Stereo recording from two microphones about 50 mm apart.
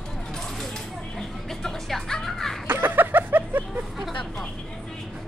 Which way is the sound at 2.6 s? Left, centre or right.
Right.